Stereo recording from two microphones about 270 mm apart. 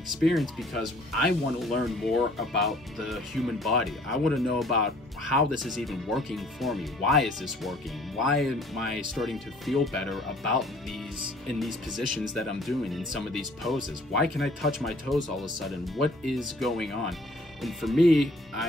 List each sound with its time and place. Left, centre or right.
0.2 s speech: centre
15.1 s speech: centre
15.6 s speech: centre